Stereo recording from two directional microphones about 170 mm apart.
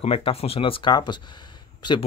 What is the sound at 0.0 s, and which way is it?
Speech, 35° left (ahead or behind).